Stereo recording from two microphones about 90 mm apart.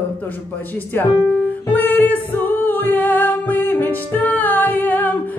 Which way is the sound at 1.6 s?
20° left (ahead or behind).